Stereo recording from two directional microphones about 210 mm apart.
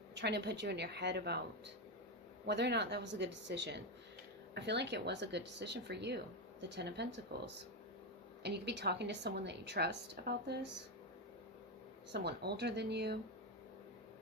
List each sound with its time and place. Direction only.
0.1 s a woman's voice: 55° right (ahead or behind)
2.5 s a woman's voice: 55° right (ahead or behind)
12.1 s a woman's voice: 50° right (ahead or behind)